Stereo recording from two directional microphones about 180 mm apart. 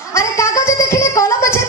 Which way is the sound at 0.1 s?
15° left (ahead or behind).